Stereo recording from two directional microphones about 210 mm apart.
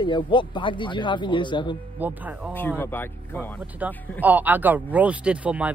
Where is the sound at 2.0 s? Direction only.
10° right (ahead or behind).